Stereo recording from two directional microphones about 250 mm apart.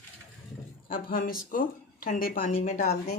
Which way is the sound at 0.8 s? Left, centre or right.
Left.